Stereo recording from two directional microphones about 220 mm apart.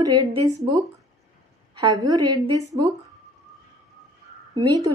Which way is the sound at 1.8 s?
20° right (ahead or behind).